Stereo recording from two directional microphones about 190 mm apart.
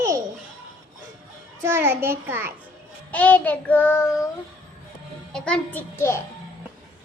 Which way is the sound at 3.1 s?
10° left (ahead or behind).